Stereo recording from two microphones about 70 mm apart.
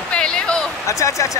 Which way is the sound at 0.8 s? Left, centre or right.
Left.